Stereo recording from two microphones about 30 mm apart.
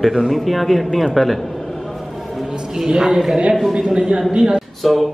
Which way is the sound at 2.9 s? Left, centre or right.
Right.